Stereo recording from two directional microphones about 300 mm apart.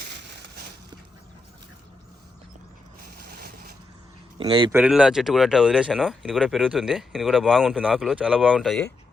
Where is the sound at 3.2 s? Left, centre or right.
Right.